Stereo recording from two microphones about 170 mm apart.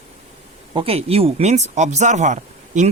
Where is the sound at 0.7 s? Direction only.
35° right (ahead or behind).